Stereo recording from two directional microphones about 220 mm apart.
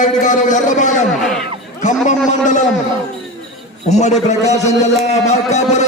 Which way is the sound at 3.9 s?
35° left (ahead or behind).